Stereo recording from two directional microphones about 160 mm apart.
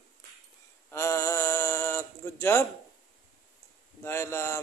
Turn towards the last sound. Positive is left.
turn(degrees=15)  # may be behind; listen again after turning